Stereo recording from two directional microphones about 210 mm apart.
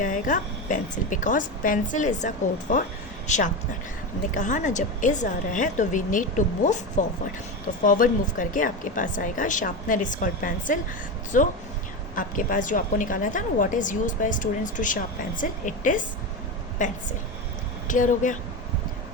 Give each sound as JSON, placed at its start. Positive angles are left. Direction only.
{"t": 0.0, "sound": "a woman's voice", "side_deg": 40}